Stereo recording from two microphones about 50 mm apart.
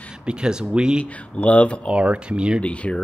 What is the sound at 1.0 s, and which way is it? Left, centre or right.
Speech, left.